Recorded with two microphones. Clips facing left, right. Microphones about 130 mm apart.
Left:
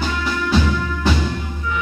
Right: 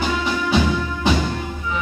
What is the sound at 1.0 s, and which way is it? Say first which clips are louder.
Music: right 1 dB; 20° right (ahead or behind).